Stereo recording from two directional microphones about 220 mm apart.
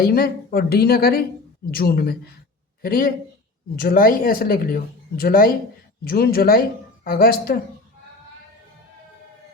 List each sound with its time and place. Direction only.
0.0 s speech: 45° left (ahead or behind)